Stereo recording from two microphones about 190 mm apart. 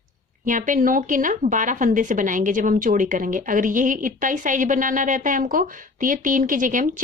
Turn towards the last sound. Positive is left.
turn(degrees=-45)  # may be behind; listen again after turning